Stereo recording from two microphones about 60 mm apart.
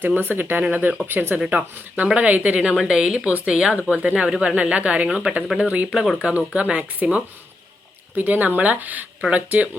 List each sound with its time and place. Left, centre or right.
0.0 s speech: right
1.5 s speech: right